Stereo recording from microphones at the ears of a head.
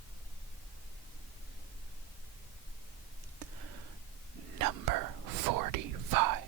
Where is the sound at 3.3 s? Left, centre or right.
Right.